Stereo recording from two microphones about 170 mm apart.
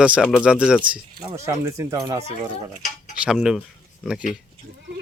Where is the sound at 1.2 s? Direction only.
20° right (ahead or behind).